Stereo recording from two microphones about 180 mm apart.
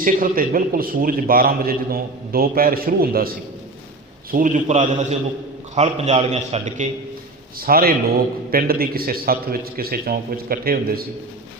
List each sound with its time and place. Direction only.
0.0 s a man's voice: 50° right (ahead or behind)
7.6 s a man's voice: 55° right (ahead or behind)